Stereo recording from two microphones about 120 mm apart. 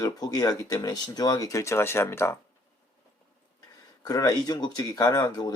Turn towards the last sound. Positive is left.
turn(degrees=30)  # may be behind; listen again after turning